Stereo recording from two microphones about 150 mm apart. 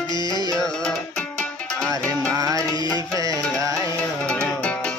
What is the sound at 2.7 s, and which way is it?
Music, 30° left (ahead or behind).